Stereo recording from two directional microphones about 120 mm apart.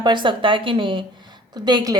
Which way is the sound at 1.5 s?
35° right (ahead or behind).